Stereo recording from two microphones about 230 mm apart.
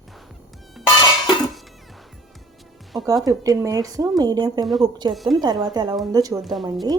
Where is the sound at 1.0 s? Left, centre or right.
Centre.